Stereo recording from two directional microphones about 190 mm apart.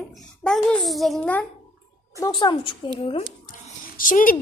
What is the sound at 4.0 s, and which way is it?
Speech, 45° left (ahead or behind).